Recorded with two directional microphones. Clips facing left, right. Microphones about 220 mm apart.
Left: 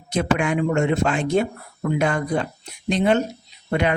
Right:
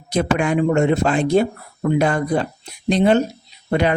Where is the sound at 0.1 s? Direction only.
35° right (ahead or behind).